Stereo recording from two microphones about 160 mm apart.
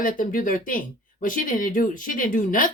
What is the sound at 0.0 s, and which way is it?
Speech, 60° left (ahead or behind).